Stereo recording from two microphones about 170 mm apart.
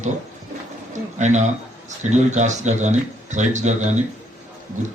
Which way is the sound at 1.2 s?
45° right (ahead or behind).